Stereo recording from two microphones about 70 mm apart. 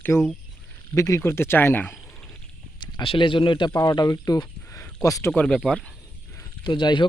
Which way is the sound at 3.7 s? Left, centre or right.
Left.